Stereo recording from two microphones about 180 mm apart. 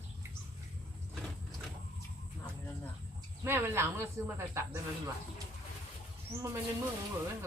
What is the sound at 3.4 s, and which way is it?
Speech, 15° right (ahead or behind).